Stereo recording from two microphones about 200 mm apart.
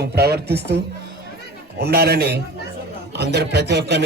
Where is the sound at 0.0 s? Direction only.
55° right (ahead or behind).